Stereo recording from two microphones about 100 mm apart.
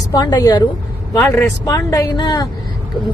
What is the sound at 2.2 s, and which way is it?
Speech, 45° left (ahead or behind).